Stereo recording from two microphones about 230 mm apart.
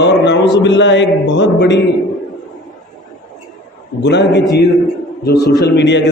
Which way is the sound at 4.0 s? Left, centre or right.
Left.